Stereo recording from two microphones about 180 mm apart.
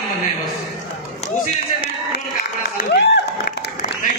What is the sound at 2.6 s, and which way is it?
Applause, 70° left (ahead or behind).